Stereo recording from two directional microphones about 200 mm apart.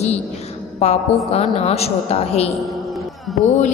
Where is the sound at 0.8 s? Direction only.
35° left (ahead or behind).